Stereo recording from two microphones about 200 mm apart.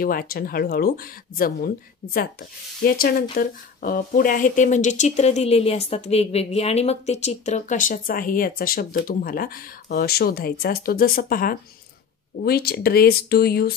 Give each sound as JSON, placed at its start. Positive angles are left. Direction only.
{"t": 0.0, "sound": "speech", "side_deg": 45}
{"t": 2.8, "sound": "speech", "side_deg": 50}